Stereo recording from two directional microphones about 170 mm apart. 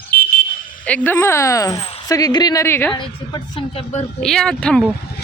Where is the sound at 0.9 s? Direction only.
10° left (ahead or behind).